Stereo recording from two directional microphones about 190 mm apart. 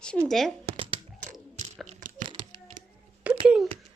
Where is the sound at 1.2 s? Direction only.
40° right (ahead or behind).